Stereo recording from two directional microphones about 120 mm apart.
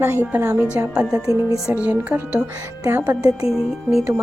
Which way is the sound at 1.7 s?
10° right (ahead or behind).